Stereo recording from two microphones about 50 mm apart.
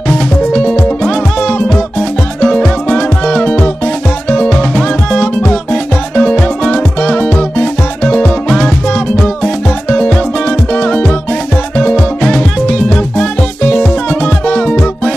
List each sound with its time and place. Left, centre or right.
0.5 s music: left
2.0 s music: centre
11.9 s music: centre